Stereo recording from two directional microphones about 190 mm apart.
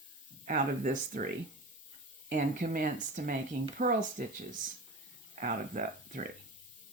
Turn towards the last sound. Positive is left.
turn(degrees=-45)  # may be behind; listen again after turning